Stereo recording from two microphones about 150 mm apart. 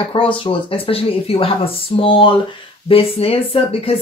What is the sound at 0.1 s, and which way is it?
Speech, 35° left (ahead or behind).